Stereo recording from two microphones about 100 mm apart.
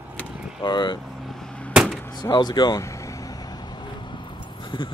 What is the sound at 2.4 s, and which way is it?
Vehicle, 45° left (ahead or behind).